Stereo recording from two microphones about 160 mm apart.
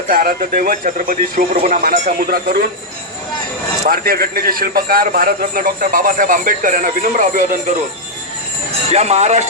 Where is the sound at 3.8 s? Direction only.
70° right (ahead or behind).